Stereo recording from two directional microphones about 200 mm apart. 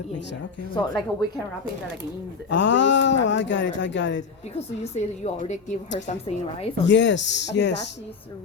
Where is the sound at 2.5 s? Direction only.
65° left (ahead or behind).